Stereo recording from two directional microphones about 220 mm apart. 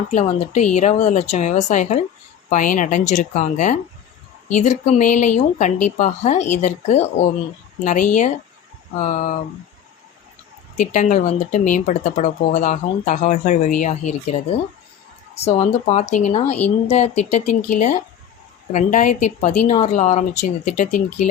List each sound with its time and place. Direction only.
0.1 s speech: 30° left (ahead or behind)
10.8 s speech: 35° left (ahead or behind)